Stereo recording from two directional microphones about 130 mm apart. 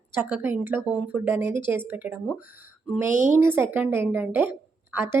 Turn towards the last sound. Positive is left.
turn(degrees=-15)  # may be behind; listen again after turning